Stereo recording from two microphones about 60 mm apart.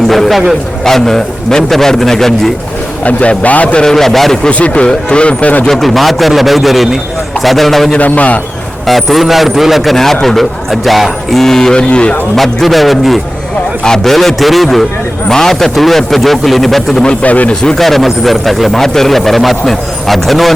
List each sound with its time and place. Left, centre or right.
0.1 s a sound: centre
0.9 s speech: centre
3.0 s speech: left
3.8 s speech: centre
4.4 s speech: left
5.6 s speech: centre
7.9 s speech: left
8.9 s speech: centre
12.4 s speech: centre
17.2 s speech: left
17.6 s speech: centre